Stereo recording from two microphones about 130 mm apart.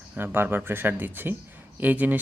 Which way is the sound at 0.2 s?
15° right (ahead or behind).